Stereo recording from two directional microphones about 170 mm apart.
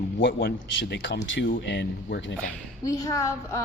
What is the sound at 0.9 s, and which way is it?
Speech, 90° left.